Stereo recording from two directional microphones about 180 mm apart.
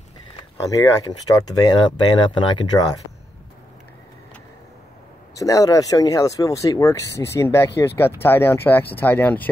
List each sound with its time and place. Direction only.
0.7 s speech: 20° left (ahead or behind)
5.3 s speech: 20° left (ahead or behind)